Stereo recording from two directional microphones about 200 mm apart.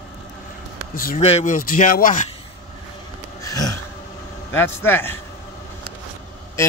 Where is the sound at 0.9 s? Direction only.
45° left (ahead or behind).